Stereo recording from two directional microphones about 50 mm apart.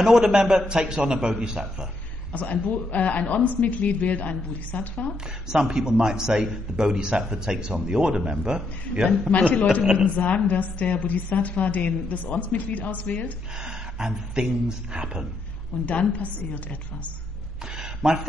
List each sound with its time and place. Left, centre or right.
0.0 s a man's voice: centre
2.3 s a woman's voice: left
5.5 s a man's voice: centre
9.3 s a woman's voice: left
13.6 s a man's voice: centre
15.8 s a woman's voice: left
17.7 s a sound: centre